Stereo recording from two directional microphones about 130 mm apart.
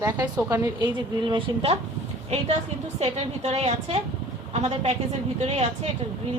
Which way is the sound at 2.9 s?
55° right (ahead or behind).